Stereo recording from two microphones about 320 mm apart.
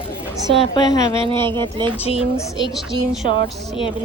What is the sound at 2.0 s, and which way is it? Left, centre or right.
Speech, centre.